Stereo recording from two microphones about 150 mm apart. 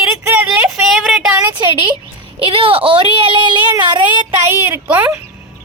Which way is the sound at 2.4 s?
35° right (ahead or behind).